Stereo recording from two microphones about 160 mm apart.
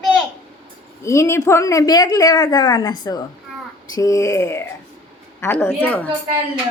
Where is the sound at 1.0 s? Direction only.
20° left (ahead or behind).